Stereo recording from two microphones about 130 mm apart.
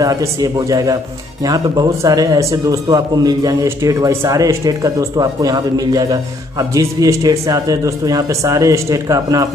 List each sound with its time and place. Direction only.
0.0 s a man's voice: 25° right (ahead or behind)